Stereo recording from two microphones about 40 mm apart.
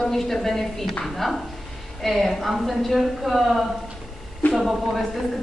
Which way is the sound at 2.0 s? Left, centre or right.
Centre.